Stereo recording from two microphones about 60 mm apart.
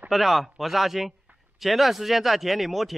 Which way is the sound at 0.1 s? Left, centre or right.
Centre.